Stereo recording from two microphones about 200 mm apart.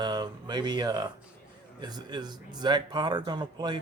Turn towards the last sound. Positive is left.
turn(degrees=-20)  # may be behind; listen again after turning